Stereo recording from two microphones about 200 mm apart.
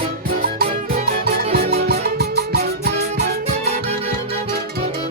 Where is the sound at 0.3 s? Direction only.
50° right (ahead or behind).